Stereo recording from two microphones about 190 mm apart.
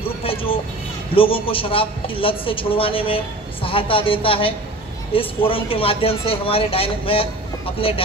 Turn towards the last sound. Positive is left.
turn(degrees=30)  # may be behind; listen again after turning